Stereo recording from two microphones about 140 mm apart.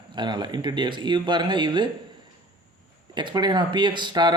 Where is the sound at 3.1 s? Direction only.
30° right (ahead or behind).